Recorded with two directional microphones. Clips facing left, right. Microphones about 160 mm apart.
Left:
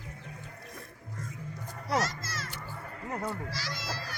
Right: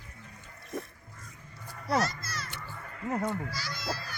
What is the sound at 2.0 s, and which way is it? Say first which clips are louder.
Children playing: right 1 dB; 90° left.